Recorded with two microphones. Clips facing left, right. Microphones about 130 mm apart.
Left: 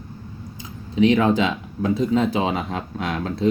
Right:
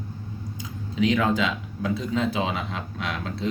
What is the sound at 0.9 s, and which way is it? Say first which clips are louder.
Speech: left 5 dB; 30° left (ahead or behind).